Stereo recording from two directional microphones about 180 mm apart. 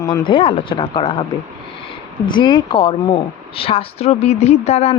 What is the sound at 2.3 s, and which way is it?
Speech, 25° left (ahead or behind).